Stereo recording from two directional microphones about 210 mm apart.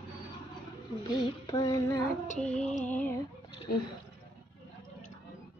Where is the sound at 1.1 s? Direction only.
20° left (ahead or behind).